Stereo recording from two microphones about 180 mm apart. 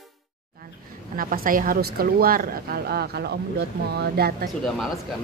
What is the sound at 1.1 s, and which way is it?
A woman's voice, 50° right (ahead or behind).